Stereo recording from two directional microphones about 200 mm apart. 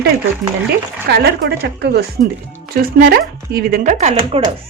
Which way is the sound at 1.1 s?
50° right (ahead or behind).